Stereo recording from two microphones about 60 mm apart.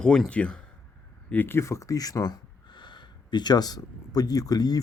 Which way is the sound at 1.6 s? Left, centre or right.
Left.